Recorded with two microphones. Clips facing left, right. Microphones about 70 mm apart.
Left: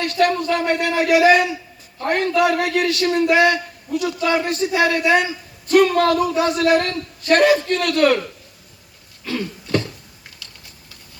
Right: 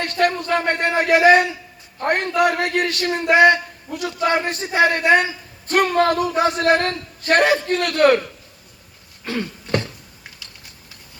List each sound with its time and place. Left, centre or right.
0.0 s a man's voice: right
5.9 s a man's voice: right
9.2 s throat clearing: right